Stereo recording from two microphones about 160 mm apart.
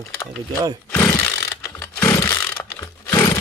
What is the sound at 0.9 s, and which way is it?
Chainsaw, 15° left (ahead or behind).